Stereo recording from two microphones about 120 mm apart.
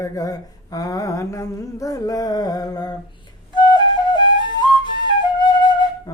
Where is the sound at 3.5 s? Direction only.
35° left (ahead or behind).